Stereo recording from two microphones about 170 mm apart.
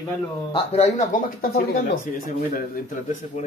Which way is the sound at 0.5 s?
40° left (ahead or behind).